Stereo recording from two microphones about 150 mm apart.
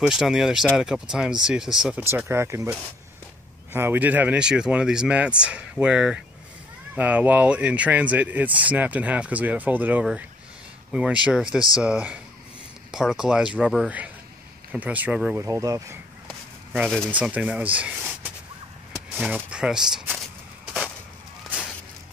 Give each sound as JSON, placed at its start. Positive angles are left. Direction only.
{"t": 0.0, "sound": "speech", "side_deg": -5}
{"t": 3.7, "sound": "speech", "side_deg": -15}
{"t": 15.3, "sound": "speech", "side_deg": -20}
{"t": 16.7, "sound": "speech", "side_deg": -10}